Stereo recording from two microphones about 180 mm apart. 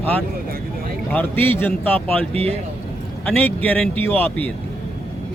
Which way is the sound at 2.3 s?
35° right (ahead or behind).